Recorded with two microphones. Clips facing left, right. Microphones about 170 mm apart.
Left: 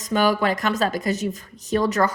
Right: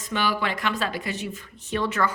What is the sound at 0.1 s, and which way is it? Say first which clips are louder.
Speech: left 6 dB; 40° left (ahead or behind).